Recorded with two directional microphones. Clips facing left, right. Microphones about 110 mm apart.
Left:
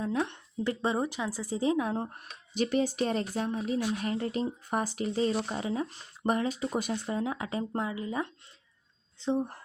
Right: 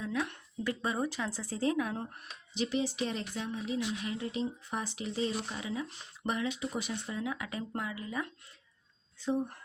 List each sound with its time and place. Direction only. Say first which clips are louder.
0.0 s a woman's voice: left 4 dB; 30° left (ahead or behind)
2.6 s speech: left 5 dB; 50° left (ahead or behind); by 9.6 s 30° left (ahead or behind)